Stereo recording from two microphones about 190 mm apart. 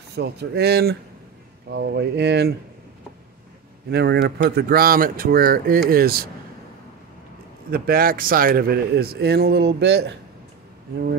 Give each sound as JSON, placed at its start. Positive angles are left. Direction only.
{"t": 0.1, "sound": "speech", "side_deg": -60}
{"t": 3.9, "sound": "speech", "side_deg": -60}
{"t": 7.7, "sound": "speech", "side_deg": -55}